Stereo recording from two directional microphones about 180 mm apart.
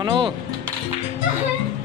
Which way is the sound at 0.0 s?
25° right (ahead or behind).